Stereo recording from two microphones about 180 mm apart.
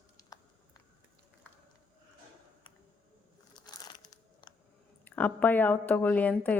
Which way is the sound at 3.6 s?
25° left (ahead or behind).